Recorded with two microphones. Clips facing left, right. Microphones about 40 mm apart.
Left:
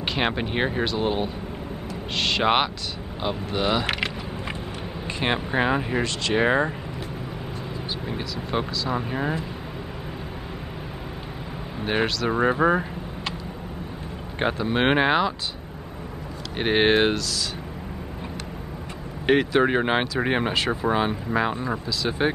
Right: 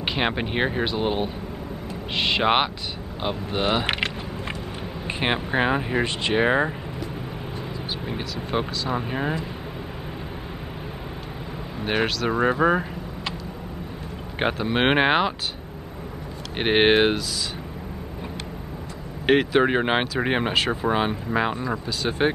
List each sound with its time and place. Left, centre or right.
0.0 s speech: centre
8.1 s speech: centre
11.8 s speech: centre
14.4 s speech: centre
16.5 s speech: right
19.2 s speech: centre